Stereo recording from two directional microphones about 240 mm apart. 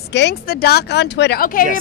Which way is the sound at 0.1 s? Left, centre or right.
Left.